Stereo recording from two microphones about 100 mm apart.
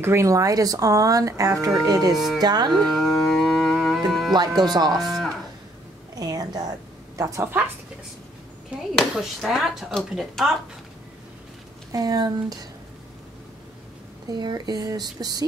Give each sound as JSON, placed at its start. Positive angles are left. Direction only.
{"t": 0.0, "sound": "speech", "side_deg": -25}
{"t": 2.1, "sound": "speech", "side_deg": 0}
{"t": 2.4, "sound": "speech", "side_deg": -45}
{"t": 2.7, "sound": "music", "side_deg": 5}
{"t": 4.3, "sound": "speech", "side_deg": -45}
{"t": 5.0, "sound": "cattle", "side_deg": 0}
{"t": 6.1, "sound": "a sound", "side_deg": -40}
{"t": 7.2, "sound": "a woman's voice", "side_deg": -35}
{"t": 8.9, "sound": "speech", "side_deg": 0}
{"t": 11.9, "sound": "speech", "side_deg": -40}
{"t": 14.3, "sound": "speech", "side_deg": -45}